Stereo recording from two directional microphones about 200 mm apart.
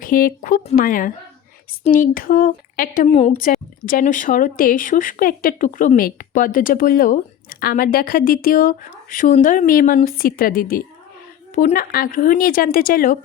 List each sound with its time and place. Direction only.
0.0 s speech: 45° left (ahead or behind)
3.1 s a woman's voice: 30° left (ahead or behind)
3.4 s speech: 45° left (ahead or behind)